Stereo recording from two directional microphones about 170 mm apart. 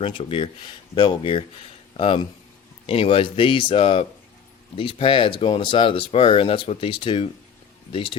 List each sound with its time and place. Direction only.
0.0 s speech: 30° left (ahead or behind)